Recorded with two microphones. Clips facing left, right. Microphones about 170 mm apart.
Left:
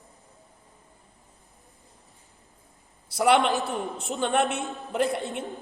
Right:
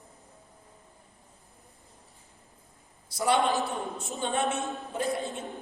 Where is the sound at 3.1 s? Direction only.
70° left (ahead or behind).